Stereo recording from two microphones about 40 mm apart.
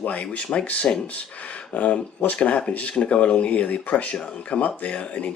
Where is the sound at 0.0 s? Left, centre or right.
Left.